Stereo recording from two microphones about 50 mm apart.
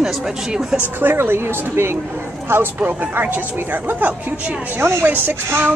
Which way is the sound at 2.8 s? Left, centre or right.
Right.